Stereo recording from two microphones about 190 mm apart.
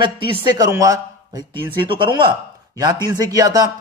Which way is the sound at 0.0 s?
25° right (ahead or behind).